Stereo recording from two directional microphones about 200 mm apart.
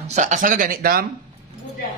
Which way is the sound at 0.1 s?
35° right (ahead or behind).